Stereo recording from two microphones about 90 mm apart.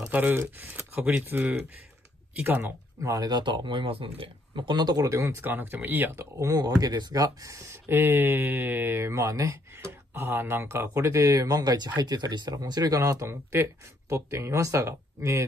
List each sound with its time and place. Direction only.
0.1 s speech: 20° right (ahead or behind)
3.0 s speech: 45° right (ahead or behind)
5.4 s speech: 20° right (ahead or behind)
6.3 s speech: 45° right (ahead or behind)
13.3 s speech: 30° right (ahead or behind)